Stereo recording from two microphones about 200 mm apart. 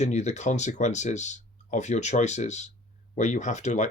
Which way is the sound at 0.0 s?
35° left (ahead or behind).